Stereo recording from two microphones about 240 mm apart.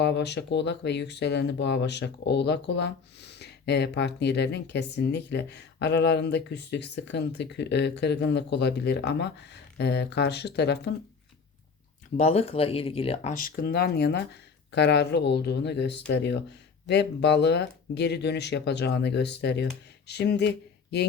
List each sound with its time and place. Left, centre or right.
0.0 s speech: left
12.1 s speech: left